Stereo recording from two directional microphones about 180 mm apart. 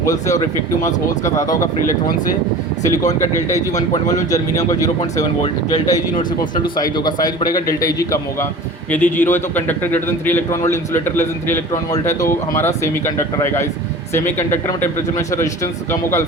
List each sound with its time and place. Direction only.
0.0 s a man's voice: 20° left (ahead or behind)
1.6 s speech: 50° left (ahead or behind)
3.5 s a man's voice: 20° left (ahead or behind)